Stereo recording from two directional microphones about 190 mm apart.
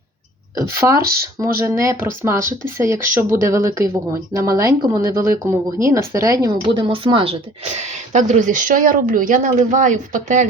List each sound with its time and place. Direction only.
0.5 s speech: 15° right (ahead or behind)
0.9 s speech: 50° right (ahead or behind)
1.5 s speech: 15° right (ahead or behind)
6.8 s speech: 25° right (ahead or behind)
7.7 s speech: 40° right (ahead or behind)